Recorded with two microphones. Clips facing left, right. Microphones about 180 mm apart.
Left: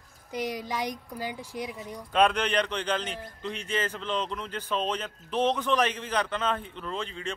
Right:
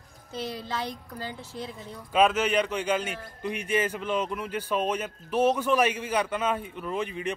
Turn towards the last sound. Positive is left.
turn(degrees=-15)  # may be behind; listen again after turning